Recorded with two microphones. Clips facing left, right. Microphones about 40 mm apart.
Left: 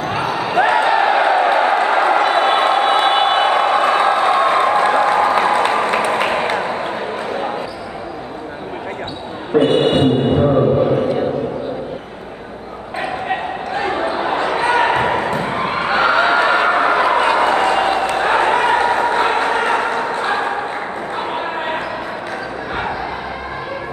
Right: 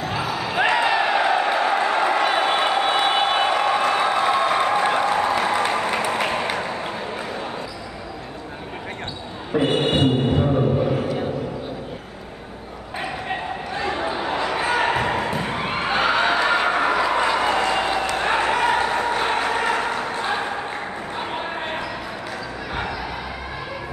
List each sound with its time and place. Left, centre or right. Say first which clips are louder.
0.3 s basketball bounce: left 6 dB; centre
0.6 s a sound: left 5 dB; centre
9.7 s mantra: left 4 dB; centre
13.3 s basketball bounce: left 6 dB; centre
18.1 s a sound: left 5 dB; centre
21.2 s bow-wow: left 5 dB; centre